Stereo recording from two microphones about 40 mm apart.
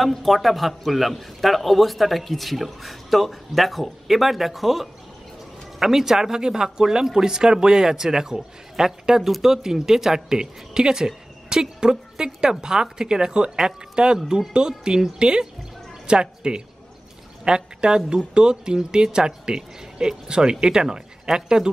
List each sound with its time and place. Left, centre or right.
0.0 s a man's voice: centre